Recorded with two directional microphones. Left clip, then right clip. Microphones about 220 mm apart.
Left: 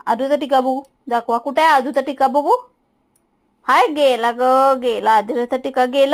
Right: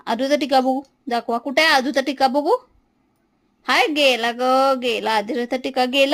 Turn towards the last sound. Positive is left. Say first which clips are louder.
# left 3 dB
turn(degrees=-10)  # may be behind; listen again after turning